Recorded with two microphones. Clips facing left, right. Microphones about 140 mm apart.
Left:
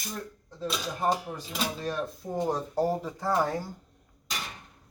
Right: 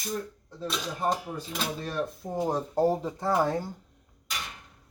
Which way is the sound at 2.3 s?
10° right (ahead or behind).